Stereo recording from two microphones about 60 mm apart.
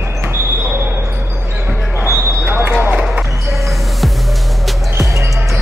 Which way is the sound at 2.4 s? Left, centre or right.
Right.